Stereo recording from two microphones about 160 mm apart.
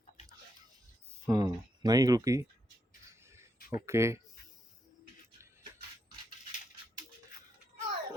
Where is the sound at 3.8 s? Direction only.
15° right (ahead or behind).